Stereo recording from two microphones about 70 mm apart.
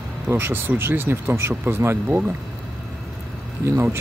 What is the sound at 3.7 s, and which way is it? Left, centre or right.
Speech, right.